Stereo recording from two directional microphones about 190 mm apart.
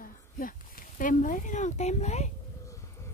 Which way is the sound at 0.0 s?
45° left (ahead or behind).